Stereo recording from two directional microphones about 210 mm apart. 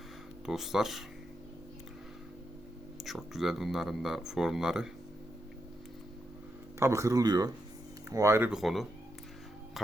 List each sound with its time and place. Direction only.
0.4 s speech: centre (ahead or behind)
3.0 s speech: centre (ahead or behind)
6.7 s speech: 15° right (ahead or behind)